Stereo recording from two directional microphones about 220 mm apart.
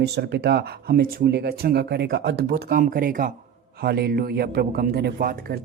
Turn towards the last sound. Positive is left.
turn(degrees=-40)  # may be behind; listen again after turning